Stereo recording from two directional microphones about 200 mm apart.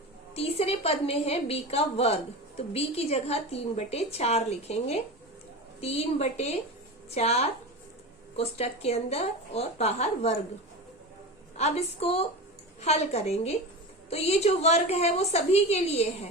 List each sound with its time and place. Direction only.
0.3 s a woman's voice: 30° left (ahead or behind)
11.5 s a woman's voice: 30° left (ahead or behind)